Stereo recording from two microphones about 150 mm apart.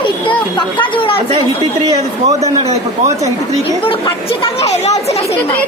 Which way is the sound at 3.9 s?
35° left (ahead or behind).